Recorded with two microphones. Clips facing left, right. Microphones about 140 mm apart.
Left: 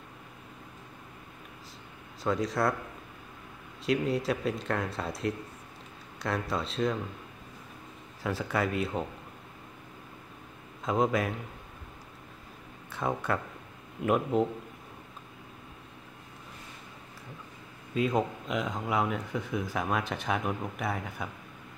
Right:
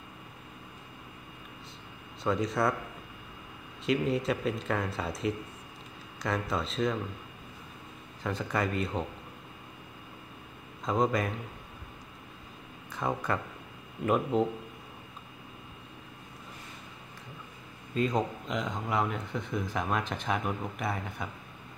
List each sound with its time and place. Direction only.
2.2 s speech: centre (ahead or behind)
3.8 s speech: centre (ahead or behind)
8.2 s speech: 5° left (ahead or behind)
10.9 s speech: centre (ahead or behind)
12.9 s speech: centre (ahead or behind)
17.9 s speech: 5° left (ahead or behind)